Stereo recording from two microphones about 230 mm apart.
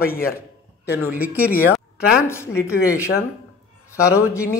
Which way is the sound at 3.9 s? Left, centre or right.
Centre.